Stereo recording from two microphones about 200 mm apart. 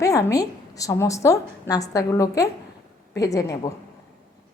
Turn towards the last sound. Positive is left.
turn(degrees=15)  # may be behind; listen again after turning